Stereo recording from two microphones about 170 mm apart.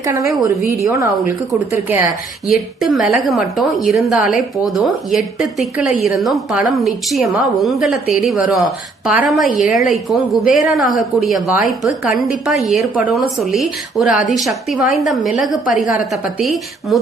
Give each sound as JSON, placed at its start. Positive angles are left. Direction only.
{"t": 0.0, "sound": "a woman's voice", "side_deg": -20}
{"t": 2.8, "sound": "a woman's voice", "side_deg": 0}